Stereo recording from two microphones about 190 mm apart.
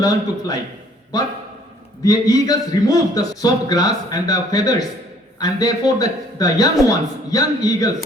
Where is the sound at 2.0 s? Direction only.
20° left (ahead or behind).